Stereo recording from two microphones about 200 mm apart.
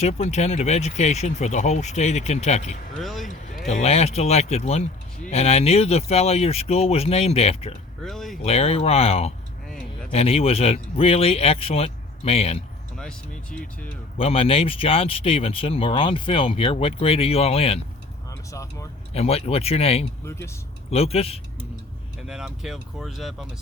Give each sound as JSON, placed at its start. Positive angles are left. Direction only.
{"t": 0.0, "sound": "speech", "side_deg": 35}
{"t": 2.9, "sound": "speech", "side_deg": 0}
{"t": 3.7, "sound": "speech", "side_deg": 35}
{"t": 8.0, "sound": "speech", "side_deg": 0}
{"t": 8.4, "sound": "speech", "side_deg": 30}
{"t": 13.0, "sound": "speech", "side_deg": 5}
{"t": 14.2, "sound": "speech", "side_deg": 30}
{"t": 18.3, "sound": "speech", "side_deg": 15}
{"t": 19.1, "sound": "speech", "side_deg": 30}
{"t": 20.2, "sound": "speech", "side_deg": 15}
{"t": 20.9, "sound": "speech", "side_deg": 30}
{"t": 22.3, "sound": "speech", "side_deg": -5}